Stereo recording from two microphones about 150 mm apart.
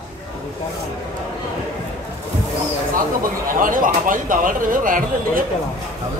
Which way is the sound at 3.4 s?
65° right (ahead or behind).